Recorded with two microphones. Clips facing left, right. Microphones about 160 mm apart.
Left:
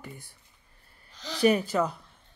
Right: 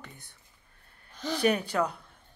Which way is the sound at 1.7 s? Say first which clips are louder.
Left 2 dB; 5° left (ahead or behind).